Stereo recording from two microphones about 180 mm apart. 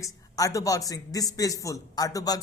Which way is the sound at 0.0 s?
20° left (ahead or behind).